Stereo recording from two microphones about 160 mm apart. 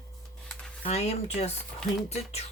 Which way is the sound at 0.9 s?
40° left (ahead or behind).